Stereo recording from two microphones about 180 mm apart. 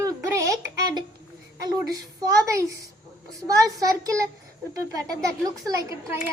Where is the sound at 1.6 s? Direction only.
20° right (ahead or behind).